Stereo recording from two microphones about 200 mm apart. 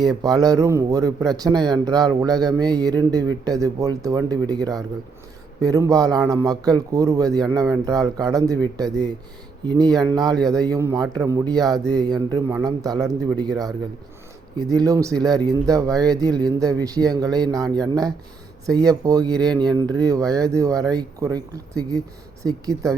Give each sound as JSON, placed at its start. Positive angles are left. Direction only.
{"t": 0.0, "sound": "a man's voice", "side_deg": -20}
{"t": 8.5, "sound": "speech", "side_deg": 10}
{"t": 9.6, "sound": "a man's voice", "side_deg": -20}